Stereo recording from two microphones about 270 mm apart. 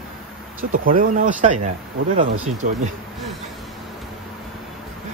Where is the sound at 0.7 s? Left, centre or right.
Right.